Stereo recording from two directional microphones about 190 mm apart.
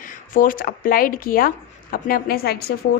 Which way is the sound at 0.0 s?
45° left (ahead or behind).